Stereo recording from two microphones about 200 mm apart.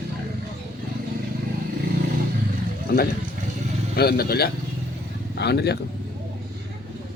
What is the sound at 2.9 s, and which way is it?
A man's voice, 50° left (ahead or behind).